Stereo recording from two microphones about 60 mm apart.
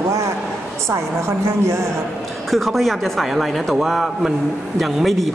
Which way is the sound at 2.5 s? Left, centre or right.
Centre.